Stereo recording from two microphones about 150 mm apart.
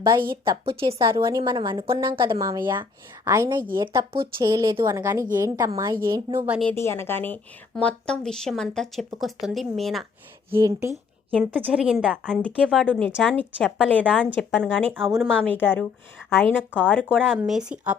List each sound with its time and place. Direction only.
0.0 s a woman's voice: 30° right (ahead or behind)
0.6 s a woman's voice: 40° right (ahead or behind)
1.1 s a woman's voice: 20° right (ahead or behind)
1.4 s a woman's voice: 35° right (ahead or behind)
3.8 s a woman's voice: 30° right (ahead or behind)
6.7 s speech: 15° left (ahead or behind); by 10.1 s centre (ahead or behind)
10.6 s a woman's voice: 20° right (ahead or behind)
11.3 s a woman's voice: 5° left (ahead or behind)
12.3 s speech: 10° left (ahead or behind)
12.6 s speech: 5° right (ahead or behind)
12.9 s speech: 10° left (ahead or behind)
17.2 s speech: centre (ahead or behind)